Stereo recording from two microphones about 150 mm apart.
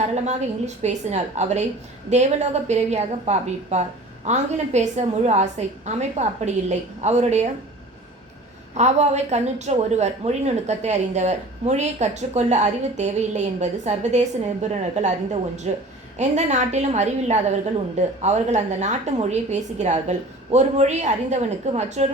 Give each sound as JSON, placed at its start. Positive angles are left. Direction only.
{"t": 0.0, "sound": "a woman's voice", "side_deg": -50}
{"t": 8.7, "sound": "a woman's voice", "side_deg": -50}